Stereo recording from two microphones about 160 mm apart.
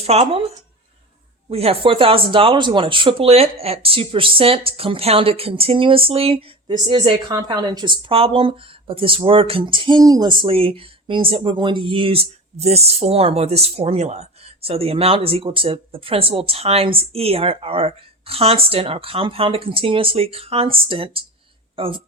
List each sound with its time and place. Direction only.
0.0 s speech: 40° right (ahead or behind)
1.5 s speech: 40° right (ahead or behind)